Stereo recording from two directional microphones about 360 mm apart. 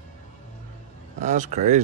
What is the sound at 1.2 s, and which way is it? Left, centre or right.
Speech, centre.